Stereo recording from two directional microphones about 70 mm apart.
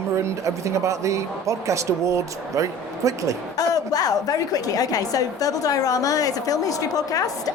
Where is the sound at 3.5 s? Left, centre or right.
Left.